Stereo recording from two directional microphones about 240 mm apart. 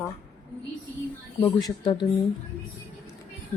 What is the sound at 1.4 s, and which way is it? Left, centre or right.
Speech, centre.